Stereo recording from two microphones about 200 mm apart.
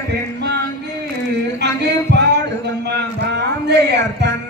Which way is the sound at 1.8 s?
60° right (ahead or behind).